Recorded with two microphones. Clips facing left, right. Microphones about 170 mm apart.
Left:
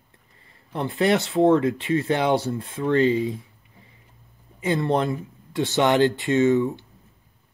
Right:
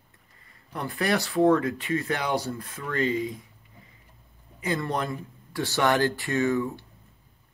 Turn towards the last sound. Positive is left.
turn(degrees=20)  # may be behind; listen again after turning